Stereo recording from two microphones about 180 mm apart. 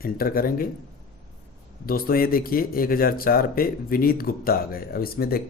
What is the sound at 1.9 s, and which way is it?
Speech, 55° left (ahead or behind).